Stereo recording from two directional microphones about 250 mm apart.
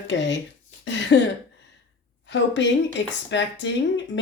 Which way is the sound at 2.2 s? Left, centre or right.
Left.